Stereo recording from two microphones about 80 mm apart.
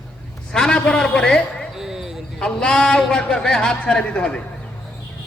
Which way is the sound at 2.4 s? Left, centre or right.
Centre.